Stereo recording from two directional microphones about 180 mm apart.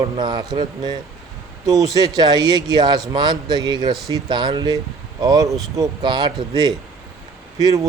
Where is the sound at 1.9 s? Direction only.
20° right (ahead or behind).